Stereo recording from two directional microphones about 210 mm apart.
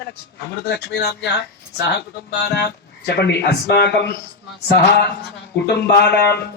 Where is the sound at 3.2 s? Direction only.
50° left (ahead or behind).